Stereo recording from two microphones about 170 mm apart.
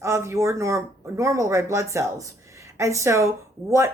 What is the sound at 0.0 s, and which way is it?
Speech, 15° right (ahead or behind).